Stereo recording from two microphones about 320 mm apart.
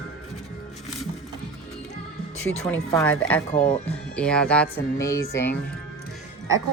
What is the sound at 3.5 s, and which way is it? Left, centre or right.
Speech, centre.